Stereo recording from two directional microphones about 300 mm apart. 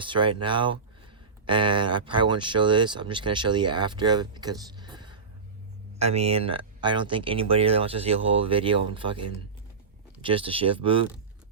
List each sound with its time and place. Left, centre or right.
0.0 s speech: centre
10.2 s speech: centre